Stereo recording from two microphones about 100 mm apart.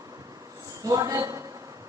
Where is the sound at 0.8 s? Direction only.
35° right (ahead or behind).